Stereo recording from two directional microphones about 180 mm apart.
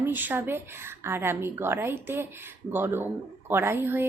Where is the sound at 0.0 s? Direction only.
10° right (ahead or behind).